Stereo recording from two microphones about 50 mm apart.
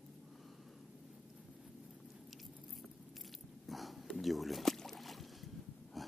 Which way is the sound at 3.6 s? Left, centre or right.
Centre.